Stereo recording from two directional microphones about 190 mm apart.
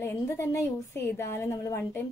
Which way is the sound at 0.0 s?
15° left (ahead or behind).